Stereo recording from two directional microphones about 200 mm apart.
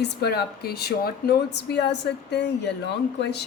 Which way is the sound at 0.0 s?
55° left (ahead or behind).